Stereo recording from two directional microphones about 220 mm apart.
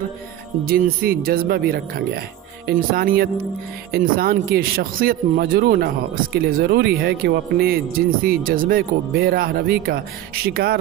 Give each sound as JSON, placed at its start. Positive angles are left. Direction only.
{"t": 0.7, "sound": "speech", "side_deg": -40}